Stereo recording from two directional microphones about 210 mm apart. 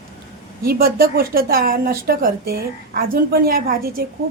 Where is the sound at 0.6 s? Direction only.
45° right (ahead or behind).